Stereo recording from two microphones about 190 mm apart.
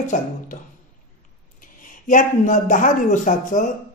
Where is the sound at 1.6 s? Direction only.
45° left (ahead or behind).